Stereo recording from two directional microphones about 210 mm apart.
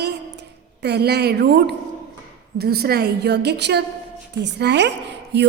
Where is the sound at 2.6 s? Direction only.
50° right (ahead or behind).